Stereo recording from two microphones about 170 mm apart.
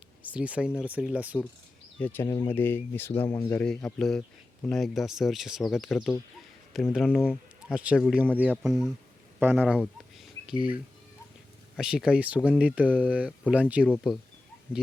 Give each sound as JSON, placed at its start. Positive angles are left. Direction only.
{"t": 0.2, "sound": "speech", "side_deg": -10}
{"t": 2.0, "sound": "speech", "side_deg": 10}
{"t": 9.4, "sound": "speech", "side_deg": -15}
{"t": 9.7, "sound": "a sound", "side_deg": 5}
{"t": 11.8, "sound": "speech", "side_deg": -5}
{"t": 13.8, "sound": "speech", "side_deg": 5}